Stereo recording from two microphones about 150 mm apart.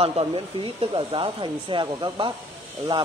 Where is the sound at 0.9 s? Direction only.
35° right (ahead or behind).